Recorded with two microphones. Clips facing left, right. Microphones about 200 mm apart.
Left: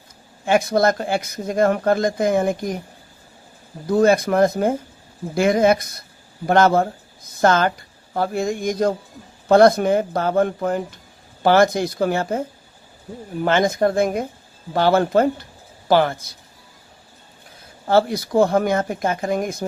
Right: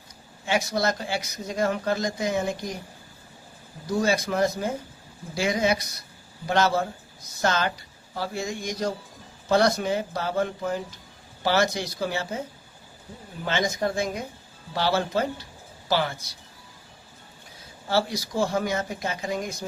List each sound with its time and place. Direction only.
0.4 s speech: 55° left (ahead or behind)
3.8 s speech: 55° left (ahead or behind)
17.8 s speech: 55° left (ahead or behind)